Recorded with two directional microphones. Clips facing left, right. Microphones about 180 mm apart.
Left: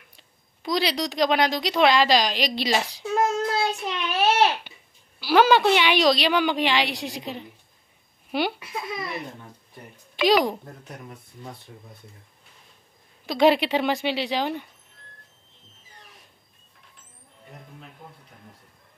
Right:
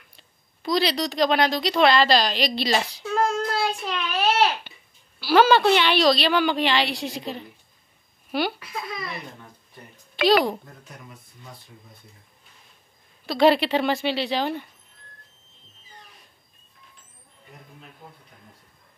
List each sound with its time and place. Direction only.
0.6 s a woman's voice: 10° left (ahead or behind)
3.0 s child singing: 20° left (ahead or behind)
5.2 s a woman's voice: 15° left (ahead or behind)
13.3 s a woman's voice: 15° left (ahead or behind)